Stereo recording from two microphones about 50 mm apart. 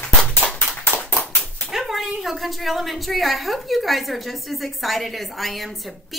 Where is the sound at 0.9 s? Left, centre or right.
Right.